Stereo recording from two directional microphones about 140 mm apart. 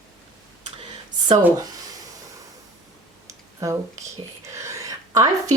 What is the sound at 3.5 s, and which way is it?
Speech, 25° right (ahead or behind).